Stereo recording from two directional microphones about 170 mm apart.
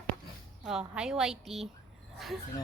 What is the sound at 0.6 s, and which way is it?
A woman's voice, 5° right (ahead or behind).